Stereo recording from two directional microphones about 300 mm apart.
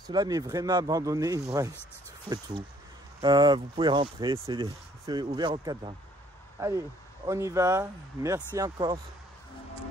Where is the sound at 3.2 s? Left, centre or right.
Centre.